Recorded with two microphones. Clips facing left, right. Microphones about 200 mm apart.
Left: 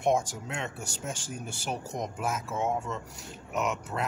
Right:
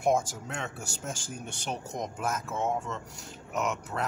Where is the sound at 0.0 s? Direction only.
Centre (ahead or behind).